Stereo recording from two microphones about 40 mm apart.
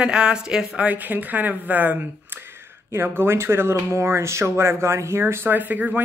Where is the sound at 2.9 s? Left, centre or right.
Right.